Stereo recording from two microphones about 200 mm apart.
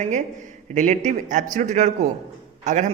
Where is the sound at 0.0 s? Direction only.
40° right (ahead or behind).